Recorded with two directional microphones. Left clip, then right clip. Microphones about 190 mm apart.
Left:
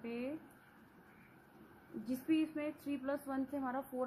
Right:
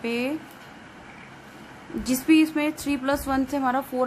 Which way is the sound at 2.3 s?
25° right (ahead or behind).